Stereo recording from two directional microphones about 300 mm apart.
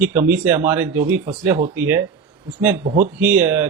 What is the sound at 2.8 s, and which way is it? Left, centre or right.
Speech, right.